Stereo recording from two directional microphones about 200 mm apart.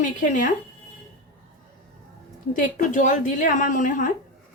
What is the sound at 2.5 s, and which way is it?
A woman's voice, 40° left (ahead or behind).